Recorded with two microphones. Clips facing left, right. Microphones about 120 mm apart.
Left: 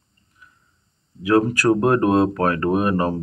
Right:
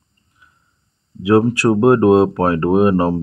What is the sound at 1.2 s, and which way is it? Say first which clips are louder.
Speech: right 4 dB; 30° right (ahead or behind).